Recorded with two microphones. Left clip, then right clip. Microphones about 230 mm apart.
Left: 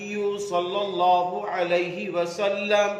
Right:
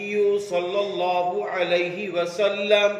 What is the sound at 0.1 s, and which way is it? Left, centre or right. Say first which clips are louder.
Mantra: right 4 dB; left.